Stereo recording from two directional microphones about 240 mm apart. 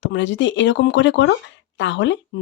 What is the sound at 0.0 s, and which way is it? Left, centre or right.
Speech, left.